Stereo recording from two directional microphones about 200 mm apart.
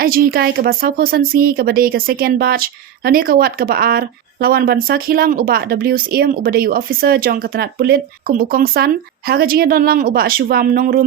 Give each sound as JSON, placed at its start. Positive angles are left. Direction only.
{"t": 0.0, "sound": "speech", "side_deg": -50}